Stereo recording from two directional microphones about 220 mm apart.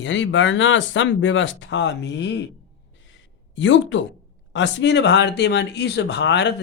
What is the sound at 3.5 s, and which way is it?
Speech, 60° left (ahead or behind).